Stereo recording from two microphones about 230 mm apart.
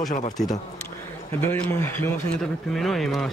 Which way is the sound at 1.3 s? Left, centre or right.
Centre.